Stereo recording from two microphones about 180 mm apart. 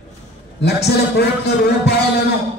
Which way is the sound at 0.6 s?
65° left (ahead or behind).